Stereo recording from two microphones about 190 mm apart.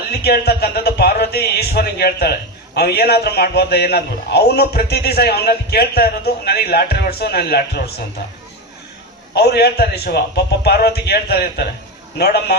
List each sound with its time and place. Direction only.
0.1 s a man's voice: 55° left (ahead or behind)
9.3 s a man's voice: 60° left (ahead or behind)